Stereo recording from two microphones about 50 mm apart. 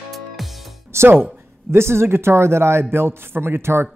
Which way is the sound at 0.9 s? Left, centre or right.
Right.